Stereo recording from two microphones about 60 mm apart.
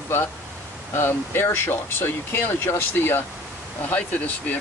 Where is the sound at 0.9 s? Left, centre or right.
Left.